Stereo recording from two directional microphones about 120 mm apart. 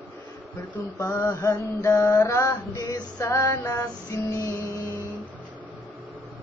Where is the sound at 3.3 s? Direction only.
15° left (ahead or behind).